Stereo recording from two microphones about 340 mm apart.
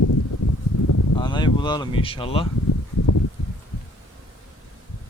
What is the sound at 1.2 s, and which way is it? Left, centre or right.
Speech, centre.